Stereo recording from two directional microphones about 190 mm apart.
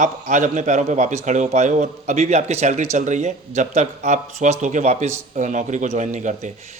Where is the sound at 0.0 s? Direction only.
40° right (ahead or behind).